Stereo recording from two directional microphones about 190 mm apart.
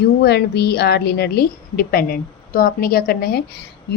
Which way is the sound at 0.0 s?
60° left (ahead or behind).